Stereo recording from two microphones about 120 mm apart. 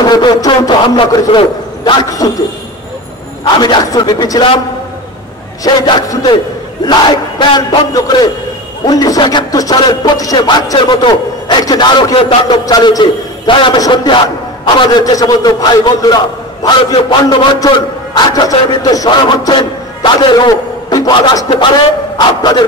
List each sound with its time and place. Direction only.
0.0 s a man's voice: 35° left (ahead or behind)
3.5 s a man's voice: 40° left (ahead or behind)
5.6 s a man's voice: 35° left (ahead or behind)
12.4 s a man's voice: 35° left (ahead or behind)